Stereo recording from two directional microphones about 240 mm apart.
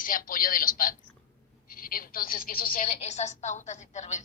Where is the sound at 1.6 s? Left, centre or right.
Left.